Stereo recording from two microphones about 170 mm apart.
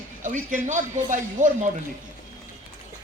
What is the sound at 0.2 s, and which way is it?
A man's voice, 50° right (ahead or behind).